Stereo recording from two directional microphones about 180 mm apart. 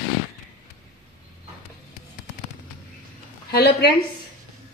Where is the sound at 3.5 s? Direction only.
65° left (ahead or behind).